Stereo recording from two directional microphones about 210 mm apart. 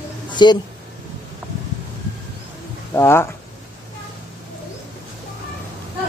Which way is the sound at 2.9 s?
10° left (ahead or behind).